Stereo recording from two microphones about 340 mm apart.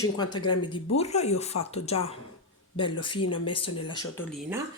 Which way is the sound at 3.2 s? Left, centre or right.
Left.